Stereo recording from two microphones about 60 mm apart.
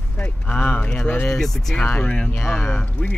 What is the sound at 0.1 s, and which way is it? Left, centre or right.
Speech, left.